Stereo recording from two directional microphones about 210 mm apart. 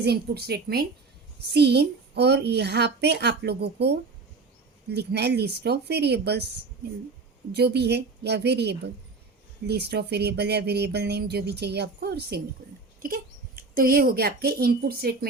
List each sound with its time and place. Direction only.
0.0 s speech: 50° right (ahead or behind)
7.5 s speech: 50° right (ahead or behind)